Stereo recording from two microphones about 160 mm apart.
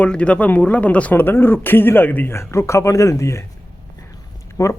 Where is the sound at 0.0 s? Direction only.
5° left (ahead or behind).